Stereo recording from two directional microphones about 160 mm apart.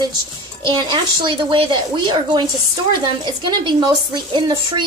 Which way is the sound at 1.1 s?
30° right (ahead or behind).